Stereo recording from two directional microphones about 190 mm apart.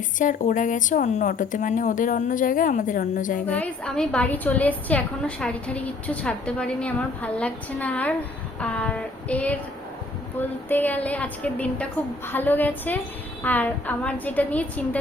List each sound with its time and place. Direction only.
0.2 s a woman's voice: 45° left (ahead or behind)
3.4 s a woman's voice: 10° left (ahead or behind)
10.7 s a woman's voice: 10° left (ahead or behind)